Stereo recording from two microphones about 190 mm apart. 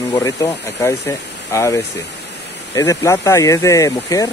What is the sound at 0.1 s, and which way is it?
Speech, 15° left (ahead or behind).